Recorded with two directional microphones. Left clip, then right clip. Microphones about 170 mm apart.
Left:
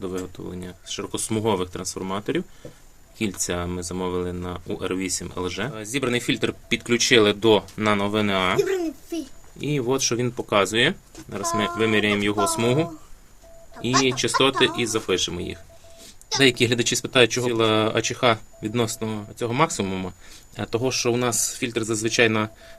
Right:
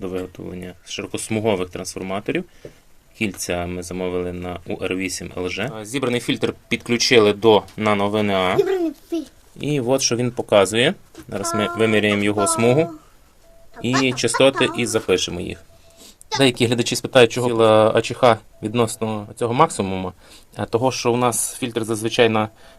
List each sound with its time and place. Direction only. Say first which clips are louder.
0.0 s speech: right 3 dB; 5° right (ahead or behind)
9.6 s speech: right 4 dB; 25° right (ahead or behind)
14.0 s speech: right 5 dB; 30° right (ahead or behind)
16.4 s speech: right 1 dB; 15° right (ahead or behind)